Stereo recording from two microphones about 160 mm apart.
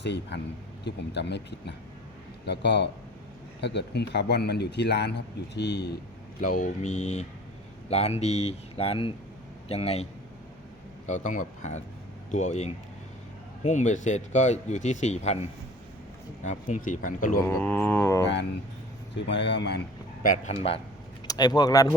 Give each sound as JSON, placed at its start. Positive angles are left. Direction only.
{"t": 0.0, "sound": "a man's voice", "side_deg": 90}
{"t": 6.4, "sound": "speech", "side_deg": 55}
{"t": 11.0, "sound": "speech", "side_deg": 50}
{"t": 17.6, "sound": "a sound", "side_deg": 10}
{"t": 19.1, "sound": "a man's voice", "side_deg": 90}
{"t": 20.2, "sound": "speech", "side_deg": 55}
{"t": 20.6, "sound": "speech", "side_deg": 35}
{"t": 21.2, "sound": "speech", "side_deg": 25}